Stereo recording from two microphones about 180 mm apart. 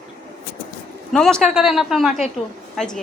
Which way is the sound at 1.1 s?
5° left (ahead or behind).